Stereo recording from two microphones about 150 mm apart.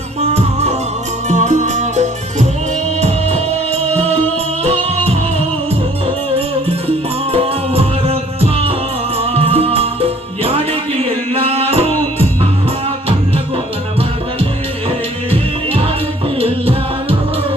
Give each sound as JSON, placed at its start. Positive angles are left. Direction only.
{"t": 0.2, "sound": "music", "side_deg": -45}
{"t": 6.3, "sound": "music", "side_deg": -40}
{"t": 15.3, "sound": "music", "side_deg": -40}